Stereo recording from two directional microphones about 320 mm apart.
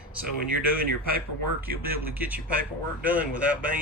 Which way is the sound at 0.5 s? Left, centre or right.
Right.